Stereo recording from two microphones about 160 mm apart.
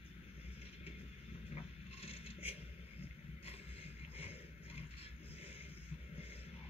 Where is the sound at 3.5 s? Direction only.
40° left (ahead or behind).